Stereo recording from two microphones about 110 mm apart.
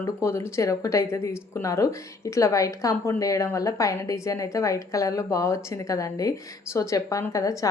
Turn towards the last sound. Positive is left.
turn(degrees=30)  # may be behind; listen again after turning